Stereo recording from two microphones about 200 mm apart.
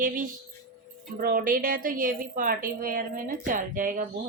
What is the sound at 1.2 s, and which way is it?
A woman's voice, 45° right (ahead or behind).